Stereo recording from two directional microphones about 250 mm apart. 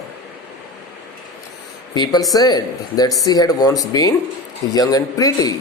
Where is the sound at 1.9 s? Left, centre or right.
Centre.